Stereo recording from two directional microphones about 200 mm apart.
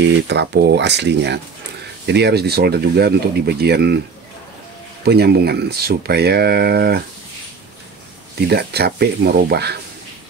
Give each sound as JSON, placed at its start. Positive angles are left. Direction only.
{"t": 0.0, "sound": "speech", "side_deg": -60}
{"t": 5.0, "sound": "speech", "side_deg": -50}
{"t": 8.4, "sound": "speech", "side_deg": -55}